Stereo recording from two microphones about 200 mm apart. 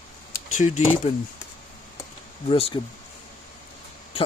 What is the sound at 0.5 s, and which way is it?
Speech, 35° left (ahead or behind).